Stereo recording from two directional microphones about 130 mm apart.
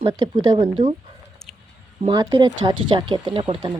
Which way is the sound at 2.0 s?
35° right (ahead or behind).